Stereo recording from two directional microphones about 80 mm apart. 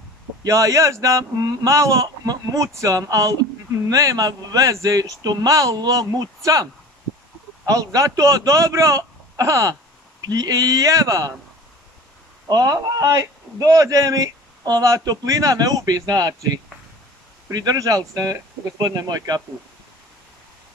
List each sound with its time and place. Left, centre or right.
0.4 s a man's voice: right
12.4 s a man's voice: right
17.5 s a man's voice: right